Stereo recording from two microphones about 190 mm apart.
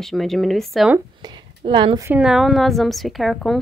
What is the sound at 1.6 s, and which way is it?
Speech, 25° right (ahead or behind).